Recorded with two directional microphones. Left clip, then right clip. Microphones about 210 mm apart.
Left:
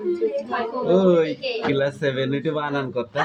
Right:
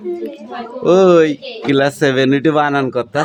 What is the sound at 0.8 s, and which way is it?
Speech, 50° right (ahead or behind).